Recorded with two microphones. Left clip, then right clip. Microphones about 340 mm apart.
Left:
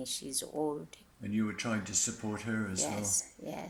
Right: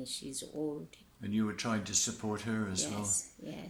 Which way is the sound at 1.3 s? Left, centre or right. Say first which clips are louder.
Even; centre.